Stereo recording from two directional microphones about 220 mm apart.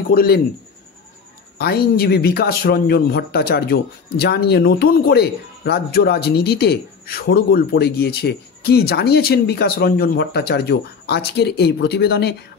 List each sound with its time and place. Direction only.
0.1 s speech: 45° left (ahead or behind)
1.6 s speech: 45° left (ahead or behind)